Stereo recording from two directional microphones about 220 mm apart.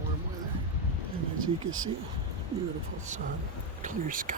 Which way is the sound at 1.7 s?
65° right (ahead or behind).